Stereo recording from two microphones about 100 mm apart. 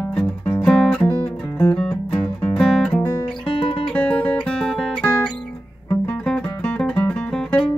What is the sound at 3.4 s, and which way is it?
Music, 65° left (ahead or behind).